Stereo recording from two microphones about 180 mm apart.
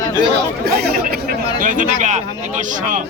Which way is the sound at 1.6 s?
45° right (ahead or behind).